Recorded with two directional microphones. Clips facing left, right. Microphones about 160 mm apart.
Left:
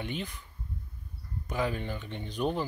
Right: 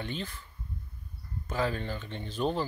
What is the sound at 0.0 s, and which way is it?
Speech, 15° left (ahead or behind).